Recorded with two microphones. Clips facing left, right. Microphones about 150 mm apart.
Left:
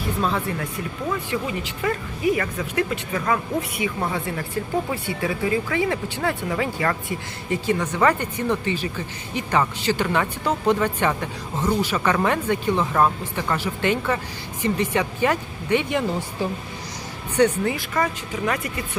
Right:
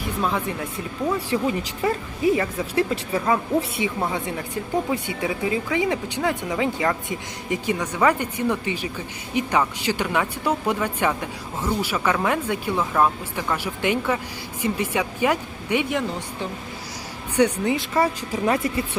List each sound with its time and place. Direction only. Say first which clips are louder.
0.2 s speech: even; 10° right (ahead or behind)
1.3 s a woman's voice: right 3 dB; 35° right (ahead or behind); by 15.9 s 10° right (ahead or behind)
17.3 s speech: even; 10° right (ahead or behind)
17.7 s a woman's voice: right 3 dB; 25° right (ahead or behind)